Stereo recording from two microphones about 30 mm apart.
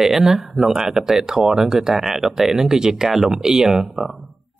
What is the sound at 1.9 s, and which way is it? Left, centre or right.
Speech, centre.